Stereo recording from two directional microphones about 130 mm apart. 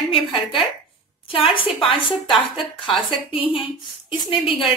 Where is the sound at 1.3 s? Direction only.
45° left (ahead or behind).